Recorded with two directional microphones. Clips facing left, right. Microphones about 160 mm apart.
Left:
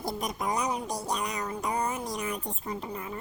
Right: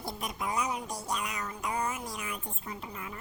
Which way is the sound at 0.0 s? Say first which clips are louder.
Left 4 dB; 40° left (ahead or behind).